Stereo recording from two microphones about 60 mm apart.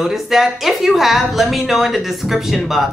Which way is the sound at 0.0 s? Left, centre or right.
Centre.